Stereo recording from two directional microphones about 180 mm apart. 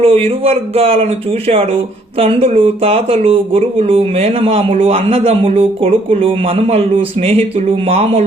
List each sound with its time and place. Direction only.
0.0 s speech: 35° right (ahead or behind)